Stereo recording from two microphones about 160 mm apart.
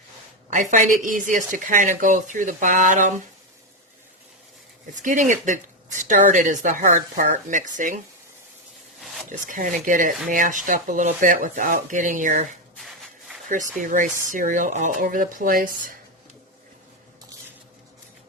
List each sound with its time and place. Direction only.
0.5 s speech: 50° right (ahead or behind)
5.0 s speech: 55° right (ahead or behind)
9.3 s speech: 55° right (ahead or behind)
13.5 s speech: 55° right (ahead or behind)